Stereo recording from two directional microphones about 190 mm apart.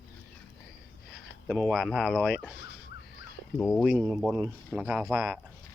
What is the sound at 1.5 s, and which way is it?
Speech, 5° right (ahead or behind).